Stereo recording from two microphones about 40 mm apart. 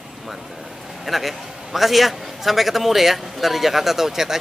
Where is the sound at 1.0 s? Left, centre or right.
Centre.